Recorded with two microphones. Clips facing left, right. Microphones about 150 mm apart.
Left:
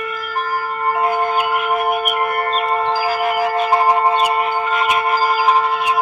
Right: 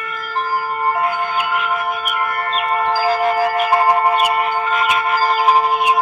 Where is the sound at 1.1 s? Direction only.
40° left (ahead or behind).